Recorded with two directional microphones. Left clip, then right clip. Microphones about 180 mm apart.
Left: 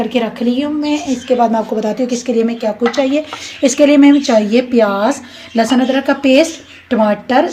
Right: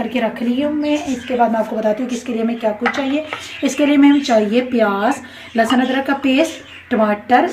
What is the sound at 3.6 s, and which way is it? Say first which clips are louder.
Speech: left 5 dB; 40° left (ahead or behind).